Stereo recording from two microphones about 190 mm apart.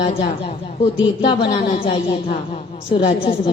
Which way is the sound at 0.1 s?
30° left (ahead or behind).